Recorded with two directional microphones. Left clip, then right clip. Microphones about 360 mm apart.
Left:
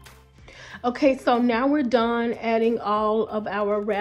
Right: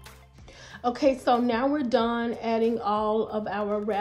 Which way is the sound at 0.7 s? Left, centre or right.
Centre.